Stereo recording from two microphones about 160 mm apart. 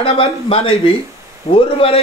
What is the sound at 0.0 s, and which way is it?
Speech, 35° left (ahead or behind).